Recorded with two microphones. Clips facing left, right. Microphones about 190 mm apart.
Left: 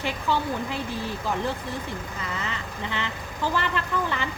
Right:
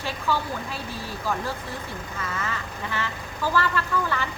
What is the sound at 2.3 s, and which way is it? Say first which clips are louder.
Speech: right 1 dB; 20° left (ahead or behind).